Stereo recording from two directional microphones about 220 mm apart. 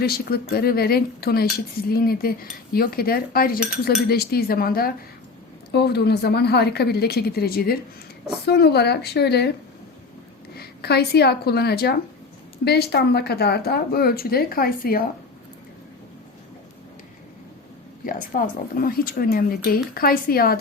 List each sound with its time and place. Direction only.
0.0 s speech: 45° left (ahead or behind)
10.6 s speech: 45° left (ahead or behind)
18.0 s speech: 40° left (ahead or behind)